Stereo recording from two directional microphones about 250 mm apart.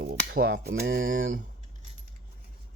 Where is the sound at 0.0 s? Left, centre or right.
Right.